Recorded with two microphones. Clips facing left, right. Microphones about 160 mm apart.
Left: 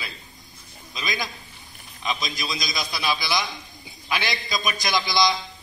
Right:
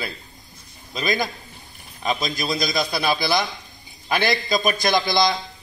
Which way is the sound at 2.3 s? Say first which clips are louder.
Right 7 dB; 60° right (ahead or behind).